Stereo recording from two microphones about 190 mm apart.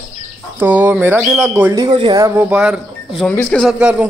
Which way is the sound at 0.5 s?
10° right (ahead or behind).